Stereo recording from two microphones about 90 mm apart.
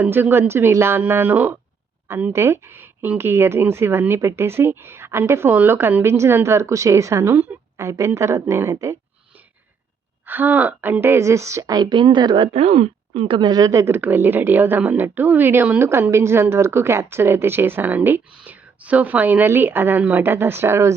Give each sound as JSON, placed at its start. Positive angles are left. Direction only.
{"t": 0.0, "sound": "speech", "side_deg": -25}
{"t": 10.2, "sound": "speech", "side_deg": -20}
{"t": 11.7, "sound": "speech", "side_deg": -55}
{"t": 13.5, "sound": "speech", "side_deg": -40}